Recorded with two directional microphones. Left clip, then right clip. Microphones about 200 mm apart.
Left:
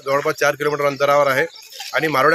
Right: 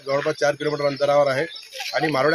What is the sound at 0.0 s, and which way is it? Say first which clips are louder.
Speech: left 3 dB; 5° left (ahead or behind).